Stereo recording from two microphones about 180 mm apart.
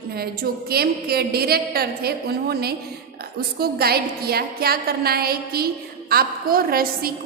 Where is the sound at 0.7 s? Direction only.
60° right (ahead or behind).